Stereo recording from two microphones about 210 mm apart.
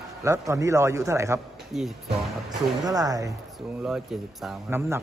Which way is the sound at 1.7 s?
Centre (ahead or behind).